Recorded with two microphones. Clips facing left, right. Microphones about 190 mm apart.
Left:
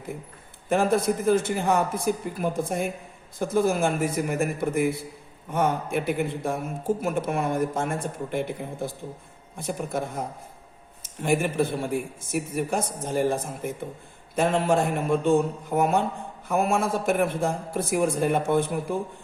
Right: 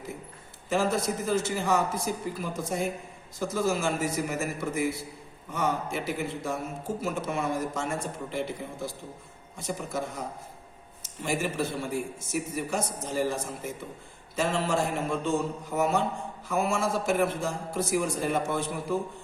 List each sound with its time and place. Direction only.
0.7 s a man's voice: 55° left (ahead or behind)